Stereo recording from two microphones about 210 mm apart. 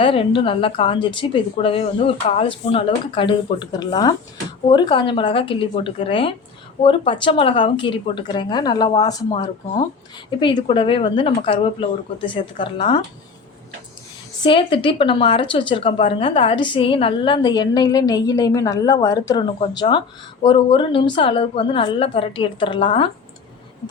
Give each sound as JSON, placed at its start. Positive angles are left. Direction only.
{"t": 0.0, "sound": "speech", "side_deg": 25}
{"t": 10.4, "sound": "speech", "side_deg": 25}
{"t": 14.4, "sound": "speech", "side_deg": 25}